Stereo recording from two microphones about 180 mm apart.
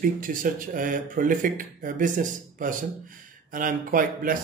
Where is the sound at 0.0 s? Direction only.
50° right (ahead or behind).